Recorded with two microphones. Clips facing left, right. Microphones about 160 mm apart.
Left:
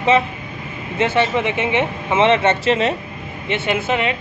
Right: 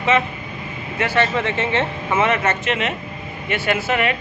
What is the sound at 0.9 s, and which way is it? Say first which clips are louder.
Speech: left 2 dB; 20° left (ahead or behind).